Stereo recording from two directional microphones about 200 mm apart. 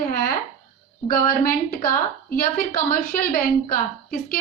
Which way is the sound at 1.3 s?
45° left (ahead or behind).